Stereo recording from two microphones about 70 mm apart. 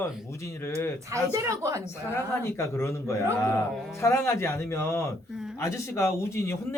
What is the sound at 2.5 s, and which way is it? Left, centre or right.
Speech, left.